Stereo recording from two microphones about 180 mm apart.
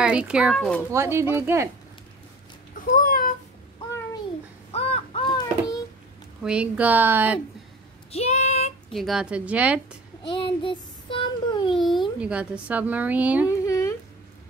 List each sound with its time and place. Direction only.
0.0 s speech: 5° right (ahead or behind)
0.9 s speech: 15° right (ahead or behind)
2.8 s a sound: 50° left (ahead or behind)
4.7 s crow: 35° left (ahead or behind)
6.4 s speech: 5° right (ahead or behind)
8.1 s female singing: 35° left (ahead or behind)
8.9 s speech: centre (ahead or behind)
10.2 s a sound: 30° left (ahead or behind)
11.7 s speech: centre (ahead or behind)
13.5 s a sound: 20° left (ahead or behind)